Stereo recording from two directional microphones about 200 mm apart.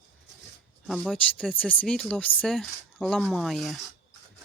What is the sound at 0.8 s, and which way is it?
Speech, centre (ahead or behind).